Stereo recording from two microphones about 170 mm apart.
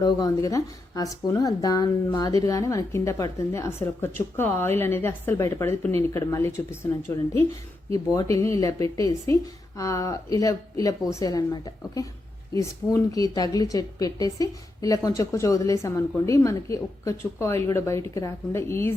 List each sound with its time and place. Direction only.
0.0 s a woman's voice: 20° left (ahead or behind)